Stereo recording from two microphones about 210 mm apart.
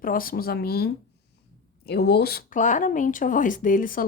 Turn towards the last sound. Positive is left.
turn(degrees=40)  # may be behind; listen again after turning